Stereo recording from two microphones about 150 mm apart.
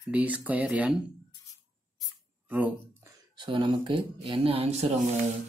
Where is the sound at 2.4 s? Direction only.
10° right (ahead or behind).